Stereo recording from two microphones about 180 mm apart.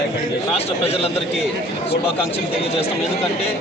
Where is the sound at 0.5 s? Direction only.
35° left (ahead or behind).